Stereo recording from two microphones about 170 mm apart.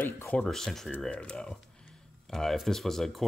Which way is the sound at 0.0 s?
10° left (ahead or behind).